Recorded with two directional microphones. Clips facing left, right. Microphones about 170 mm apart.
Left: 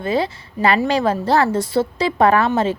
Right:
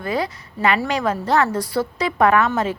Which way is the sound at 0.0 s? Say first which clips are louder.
Left 3 dB; 25° left (ahead or behind).